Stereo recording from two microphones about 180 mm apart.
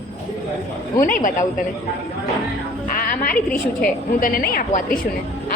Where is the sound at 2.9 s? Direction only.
50° left (ahead or behind).